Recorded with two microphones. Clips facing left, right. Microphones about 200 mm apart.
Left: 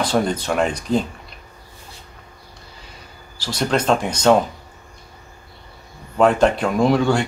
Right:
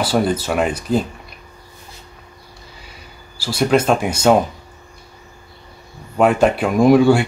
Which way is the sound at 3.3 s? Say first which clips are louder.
Right 5 dB; 10° right (ahead or behind).